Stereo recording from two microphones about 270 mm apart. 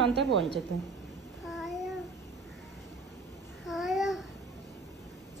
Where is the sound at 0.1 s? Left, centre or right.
Right.